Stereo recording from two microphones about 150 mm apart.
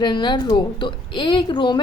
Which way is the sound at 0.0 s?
30° left (ahead or behind).